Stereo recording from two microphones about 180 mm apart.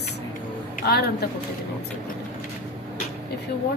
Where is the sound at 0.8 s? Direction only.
60° left (ahead or behind).